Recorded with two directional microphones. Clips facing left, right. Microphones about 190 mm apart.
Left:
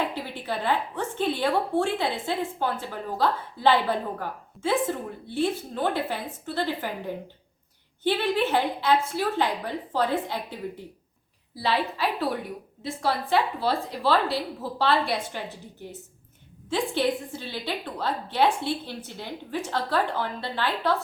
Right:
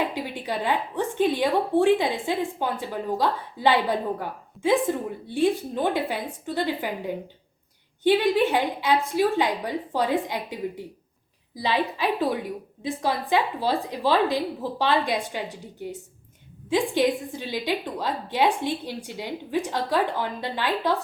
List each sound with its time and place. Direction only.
0.1 s a woman's voice: 15° right (ahead or behind)
8.0 s a woman's voice: 15° right (ahead or behind)